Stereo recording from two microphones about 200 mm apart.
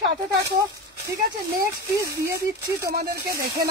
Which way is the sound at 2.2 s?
15° right (ahead or behind).